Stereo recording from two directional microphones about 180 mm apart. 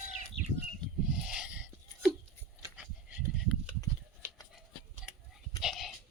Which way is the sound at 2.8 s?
5° right (ahead or behind).